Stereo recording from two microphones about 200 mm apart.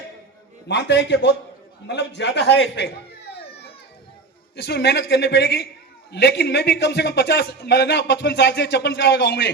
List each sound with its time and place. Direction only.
0.7 s a man's voice: 60° left (ahead or behind)
4.5 s a man's voice: 55° left (ahead or behind)